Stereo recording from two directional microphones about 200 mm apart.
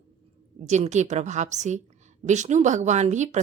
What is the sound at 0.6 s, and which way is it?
A woman's voice, 35° right (ahead or behind).